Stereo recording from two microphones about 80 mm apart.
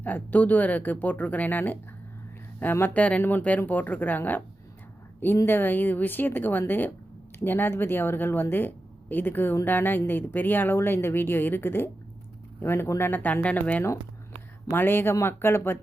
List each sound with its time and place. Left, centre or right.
0.0 s speech: left
2.9 s speech: centre
5.5 s speech: left